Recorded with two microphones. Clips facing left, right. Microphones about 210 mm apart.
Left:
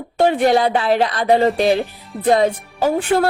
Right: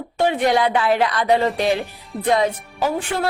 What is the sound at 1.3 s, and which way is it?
A woman's voice, 40° left (ahead or behind).